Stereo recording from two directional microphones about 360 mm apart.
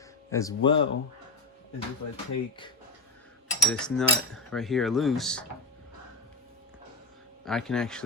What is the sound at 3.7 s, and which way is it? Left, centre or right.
Speech, centre.